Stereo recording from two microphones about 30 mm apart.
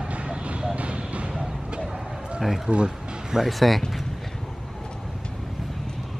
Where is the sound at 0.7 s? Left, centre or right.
Right.